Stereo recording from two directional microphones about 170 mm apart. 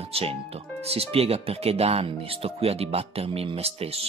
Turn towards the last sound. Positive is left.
turn(degrees=-35)  # may be behind; listen again after turning